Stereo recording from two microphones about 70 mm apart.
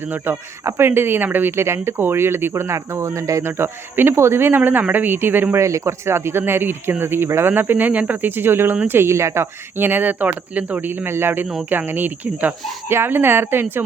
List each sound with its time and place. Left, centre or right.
0.3 s speech: right
5.5 s speech: right